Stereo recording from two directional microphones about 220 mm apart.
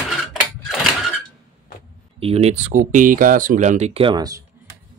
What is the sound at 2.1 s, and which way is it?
Speech, 25° right (ahead or behind).